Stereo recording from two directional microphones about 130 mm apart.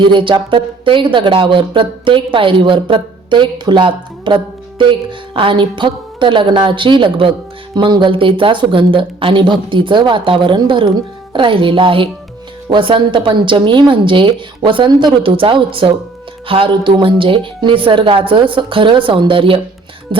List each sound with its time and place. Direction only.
0.0 s speech: 40° right (ahead or behind)